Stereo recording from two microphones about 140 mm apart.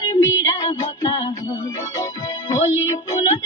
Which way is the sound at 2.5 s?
25° left (ahead or behind).